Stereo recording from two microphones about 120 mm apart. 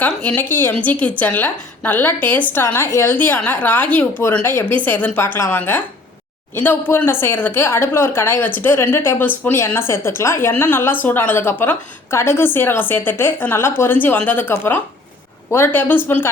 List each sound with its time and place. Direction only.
0.0 s a woman's voice: 10° left (ahead or behind)